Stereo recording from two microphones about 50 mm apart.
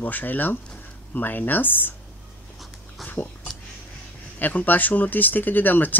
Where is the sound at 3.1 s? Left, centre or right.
Left.